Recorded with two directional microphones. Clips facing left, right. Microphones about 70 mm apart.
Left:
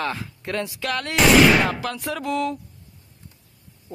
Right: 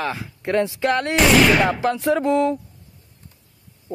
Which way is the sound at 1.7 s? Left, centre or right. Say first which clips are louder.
Right 7 dB; right.